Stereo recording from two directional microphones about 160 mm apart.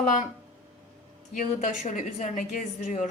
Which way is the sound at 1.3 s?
50° left (ahead or behind).